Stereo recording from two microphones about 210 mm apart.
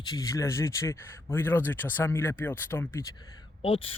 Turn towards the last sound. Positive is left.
turn(degrees=25)  # may be behind; listen again after turning